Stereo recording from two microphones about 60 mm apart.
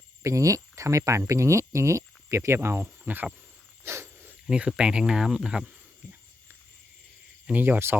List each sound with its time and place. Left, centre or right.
0.2 s speech: right
2.5 s speech: right
3.0 s speech: right
3.8 s a sound: right
4.4 s speech: centre
7.5 s cricket: right